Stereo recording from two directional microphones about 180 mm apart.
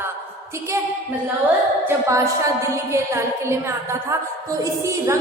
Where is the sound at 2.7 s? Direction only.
15° right (ahead or behind).